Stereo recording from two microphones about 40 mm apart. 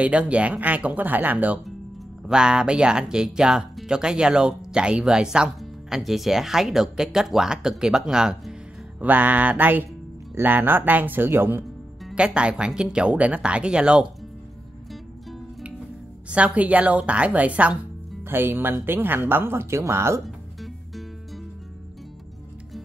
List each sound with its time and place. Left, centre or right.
0.0 s a woman's voice: right
2.2 s speech: centre
5.9 s speech: centre
9.0 s speech: right
11.2 s speech: right
12.2 s speech: right
16.3 s a woman's voice: right
18.2 s speech: right
20.2 s music: centre